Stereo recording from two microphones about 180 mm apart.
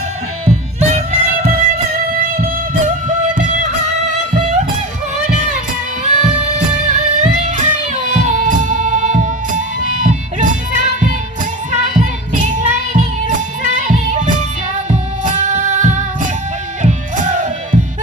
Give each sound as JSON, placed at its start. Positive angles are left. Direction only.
{"t": 0.4, "sound": "music", "side_deg": -40}
{"t": 3.3, "sound": "music", "side_deg": -45}
{"t": 6.1, "sound": "music", "side_deg": -40}